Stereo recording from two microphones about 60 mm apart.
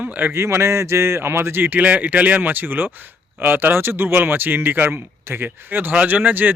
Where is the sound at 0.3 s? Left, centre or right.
Right.